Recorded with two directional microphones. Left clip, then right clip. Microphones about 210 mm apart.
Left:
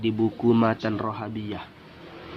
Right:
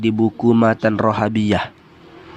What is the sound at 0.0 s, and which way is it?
Speech, 30° right (ahead or behind).